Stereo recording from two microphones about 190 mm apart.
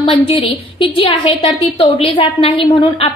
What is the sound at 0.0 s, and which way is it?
A woman's voice, 30° left (ahead or behind).